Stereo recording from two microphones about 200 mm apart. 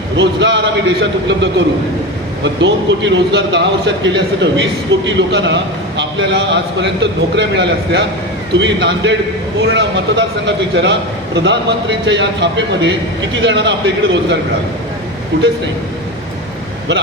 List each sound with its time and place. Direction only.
0.2 s a man's voice: 60° right (ahead or behind)
12.0 s a man's voice: 65° right (ahead or behind)